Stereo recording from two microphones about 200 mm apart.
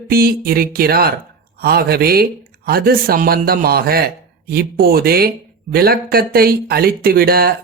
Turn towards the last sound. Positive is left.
turn(degrees=-50)  # may be behind; listen again after turning